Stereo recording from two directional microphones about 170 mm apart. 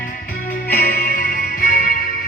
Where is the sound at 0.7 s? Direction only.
65° left (ahead or behind).